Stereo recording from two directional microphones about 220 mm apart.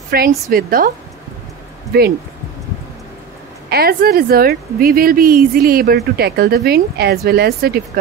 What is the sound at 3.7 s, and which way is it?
Speech, 45° right (ahead or behind).